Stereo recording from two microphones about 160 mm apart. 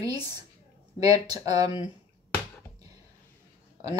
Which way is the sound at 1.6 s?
35° left (ahead or behind).